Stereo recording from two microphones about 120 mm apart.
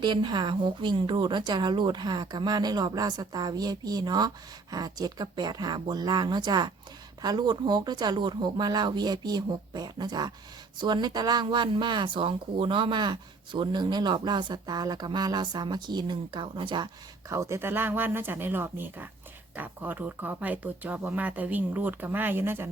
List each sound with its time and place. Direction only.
0.0 s speech: 40° right (ahead or behind); by 22.7 s 20° right (ahead or behind)